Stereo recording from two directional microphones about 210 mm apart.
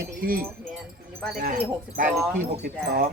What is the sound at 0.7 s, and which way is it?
Speech, centre (ahead or behind).